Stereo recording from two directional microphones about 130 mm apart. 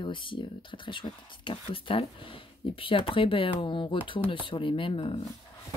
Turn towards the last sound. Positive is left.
turn(degrees=45)  # may be behind; listen again after turning